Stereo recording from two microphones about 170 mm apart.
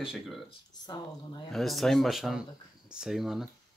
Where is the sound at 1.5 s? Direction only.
Centre (ahead or behind).